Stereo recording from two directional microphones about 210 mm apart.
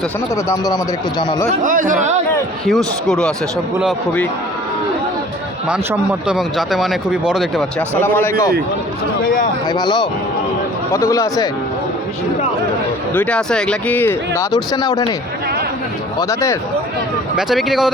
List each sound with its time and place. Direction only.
0.4 s speech: 15° left (ahead or behind)
1.6 s speech: 40° right (ahead or behind)
2.6 s speech: centre (ahead or behind)
5.6 s speech: 5° right (ahead or behind)
8.0 s speech: 10° left (ahead or behind)
9.2 s speech: 40° left (ahead or behind)
9.6 s speech: 20° left (ahead or behind)
13.1 s speech: 5° left (ahead or behind)
16.3 s speech: 15° left (ahead or behind)
17.3 s speech: centre (ahead or behind)